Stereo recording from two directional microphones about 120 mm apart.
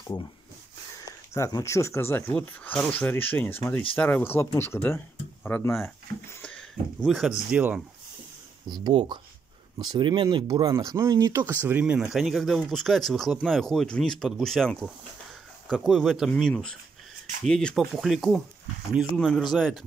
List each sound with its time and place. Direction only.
0.0 s speech: 30° left (ahead or behind)
6.4 s a sound: 10° left (ahead or behind)
7.5 s speech: 10° right (ahead or behind)
8.6 s speech: 35° right (ahead or behind); by 19.8 s centre (ahead or behind)